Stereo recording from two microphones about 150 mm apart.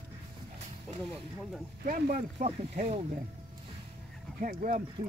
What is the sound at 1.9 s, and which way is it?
Speech, 70° right (ahead or behind).